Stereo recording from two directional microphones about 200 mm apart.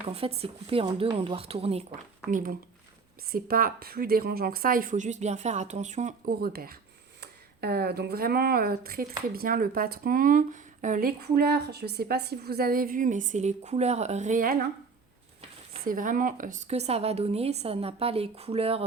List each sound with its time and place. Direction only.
0.1 s speech: 30° right (ahead or behind)
2.3 s a woman's voice: 45° right (ahead or behind)